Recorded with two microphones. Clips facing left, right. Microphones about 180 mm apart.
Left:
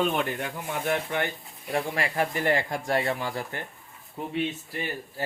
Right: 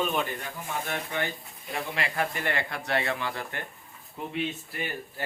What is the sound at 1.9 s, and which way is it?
Speech, 40° left (ahead or behind).